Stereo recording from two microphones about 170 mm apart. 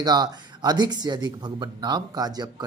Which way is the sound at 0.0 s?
25° right (ahead or behind).